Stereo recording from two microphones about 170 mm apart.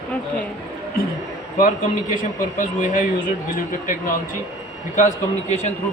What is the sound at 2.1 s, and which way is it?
Speech, 50° left (ahead or behind).